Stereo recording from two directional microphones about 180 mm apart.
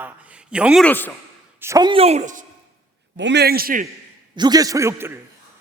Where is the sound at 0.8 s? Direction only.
10° left (ahead or behind).